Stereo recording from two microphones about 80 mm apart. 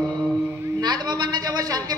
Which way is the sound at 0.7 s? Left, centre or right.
Right.